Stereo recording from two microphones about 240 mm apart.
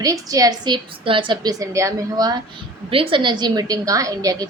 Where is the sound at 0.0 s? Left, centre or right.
Centre.